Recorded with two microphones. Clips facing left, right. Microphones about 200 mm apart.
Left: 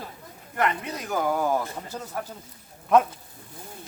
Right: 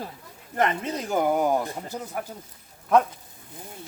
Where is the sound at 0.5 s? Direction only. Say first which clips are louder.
Right 2 dB; 25° right (ahead or behind).